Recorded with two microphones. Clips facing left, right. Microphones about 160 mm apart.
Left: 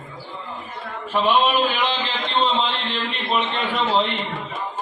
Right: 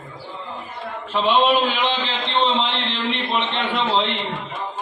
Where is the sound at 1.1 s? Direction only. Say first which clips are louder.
Right 1 dB; 20° right (ahead or behind).